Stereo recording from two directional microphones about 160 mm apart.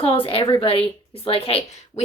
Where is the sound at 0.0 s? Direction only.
35° left (ahead or behind).